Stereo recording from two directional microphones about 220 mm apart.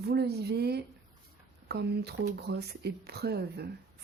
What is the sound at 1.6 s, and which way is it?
Speech, 50° right (ahead or behind).